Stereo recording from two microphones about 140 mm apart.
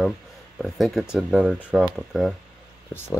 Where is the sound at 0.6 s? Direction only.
Centre (ahead or behind).